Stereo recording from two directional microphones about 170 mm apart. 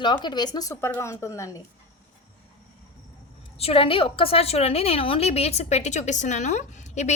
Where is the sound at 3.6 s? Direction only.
35° left (ahead or behind).